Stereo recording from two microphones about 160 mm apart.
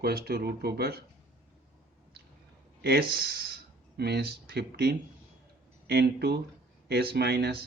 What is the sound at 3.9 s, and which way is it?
Speech, 90° right.